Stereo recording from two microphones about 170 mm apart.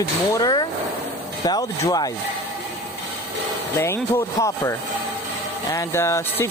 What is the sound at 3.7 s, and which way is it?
Speech, 15° left (ahead or behind).